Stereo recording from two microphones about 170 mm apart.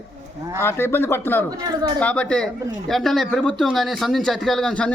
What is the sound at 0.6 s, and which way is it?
A man's voice, 15° left (ahead or behind).